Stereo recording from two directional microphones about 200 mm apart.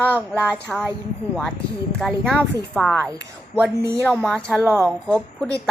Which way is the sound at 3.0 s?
15° right (ahead or behind).